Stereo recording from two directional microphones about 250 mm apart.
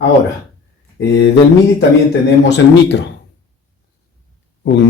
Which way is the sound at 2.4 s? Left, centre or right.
Left.